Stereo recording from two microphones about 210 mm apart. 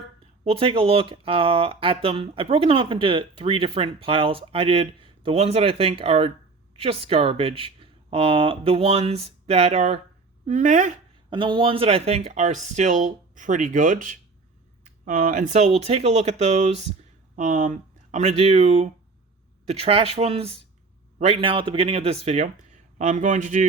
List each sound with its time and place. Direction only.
0.4 s speech: 25° right (ahead or behind)
11.3 s speech: 25° right (ahead or behind)